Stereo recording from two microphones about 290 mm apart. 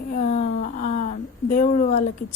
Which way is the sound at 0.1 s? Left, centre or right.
Left.